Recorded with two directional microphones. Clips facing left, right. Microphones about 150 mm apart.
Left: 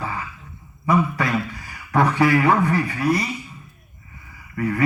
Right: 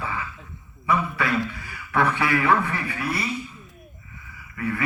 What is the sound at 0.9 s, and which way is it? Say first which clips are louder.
A man's voice: left 4 dB; 40° left (ahead or behind).